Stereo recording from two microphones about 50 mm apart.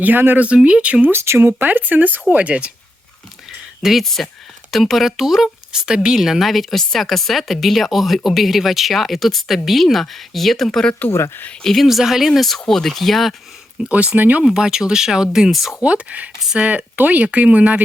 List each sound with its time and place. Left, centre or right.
0.0 s speech: right
0.3 s speech: right
1.1 s speech: right
1.4 s speech: right
3.8 s speech: centre
11.1 s speech: left
11.6 s speech: centre
13.8 s speech: right
14.4 s speech: centre
15.8 s speech: right